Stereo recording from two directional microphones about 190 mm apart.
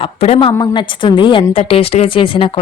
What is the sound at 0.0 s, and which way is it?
A woman's voice, 30° left (ahead or behind).